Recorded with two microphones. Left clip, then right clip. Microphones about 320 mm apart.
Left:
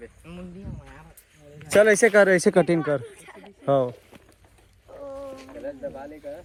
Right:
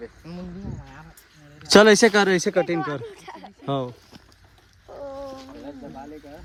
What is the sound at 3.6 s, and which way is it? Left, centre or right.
Speech, centre.